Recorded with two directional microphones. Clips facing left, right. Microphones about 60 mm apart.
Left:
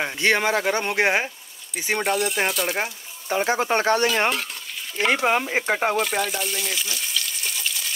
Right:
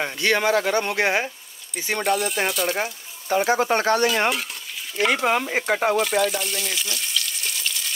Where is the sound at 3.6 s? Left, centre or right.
Left.